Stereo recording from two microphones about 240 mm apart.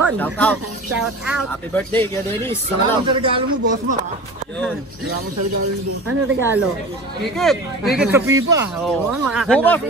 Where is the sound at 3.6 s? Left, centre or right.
Right.